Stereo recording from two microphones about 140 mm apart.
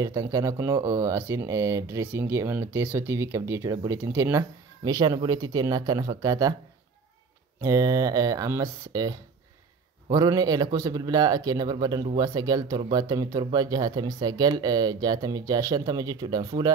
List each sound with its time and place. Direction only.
0.0 s speech: 25° right (ahead or behind)
7.6 s speech: 25° right (ahead or behind)